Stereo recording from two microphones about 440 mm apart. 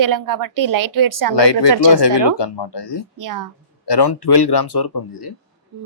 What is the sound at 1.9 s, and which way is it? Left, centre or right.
Speech, left.